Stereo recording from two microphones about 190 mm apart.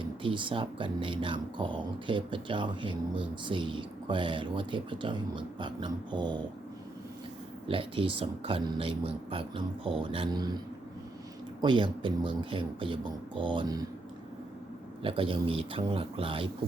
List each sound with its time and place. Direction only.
0.0 s speech: 25° right (ahead or behind)
7.7 s speech: 25° right (ahead or behind)
11.6 s speech: 25° right (ahead or behind)
15.0 s speech: 30° right (ahead or behind)